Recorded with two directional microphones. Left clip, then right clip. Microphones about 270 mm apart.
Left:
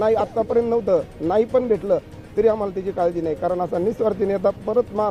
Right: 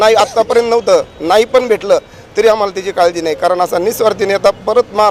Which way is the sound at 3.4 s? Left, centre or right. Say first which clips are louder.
Right 11 dB; centre.